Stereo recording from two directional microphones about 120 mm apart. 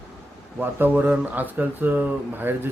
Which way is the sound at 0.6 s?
15° right (ahead or behind).